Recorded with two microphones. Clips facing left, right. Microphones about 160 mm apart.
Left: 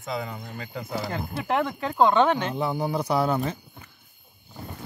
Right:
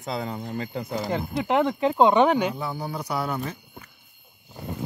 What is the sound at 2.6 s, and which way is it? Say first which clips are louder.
Speech: left 5 dB; 20° left (ahead or behind).